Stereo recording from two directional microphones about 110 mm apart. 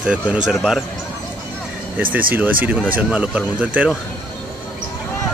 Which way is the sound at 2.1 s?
15° right (ahead or behind).